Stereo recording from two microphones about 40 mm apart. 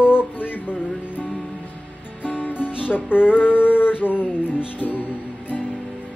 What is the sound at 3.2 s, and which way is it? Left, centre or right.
Music, left.